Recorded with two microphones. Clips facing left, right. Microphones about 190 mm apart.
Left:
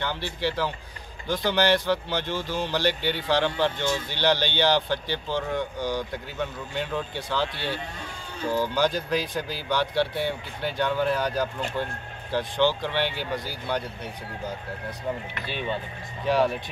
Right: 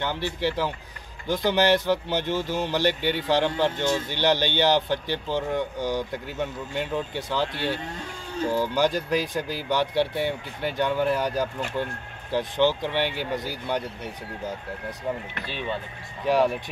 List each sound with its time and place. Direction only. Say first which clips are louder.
0.0 s speech: right 2 dB; 15° right (ahead or behind)
7.5 s speech: right 3 dB; 45° right (ahead or behind)
8.5 s speech: right 1 dB; 15° right (ahead or behind)
16.3 s speech: right 1 dB; 15° right (ahead or behind)